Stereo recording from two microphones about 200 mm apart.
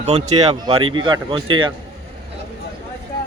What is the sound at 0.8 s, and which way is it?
Speech, 90° right.